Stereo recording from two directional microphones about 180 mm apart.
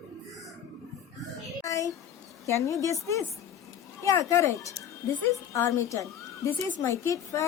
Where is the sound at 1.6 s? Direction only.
15° left (ahead or behind).